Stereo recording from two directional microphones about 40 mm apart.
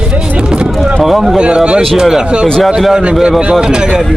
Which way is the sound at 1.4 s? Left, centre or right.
Right.